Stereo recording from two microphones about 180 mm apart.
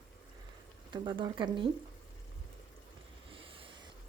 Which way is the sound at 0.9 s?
25° right (ahead or behind).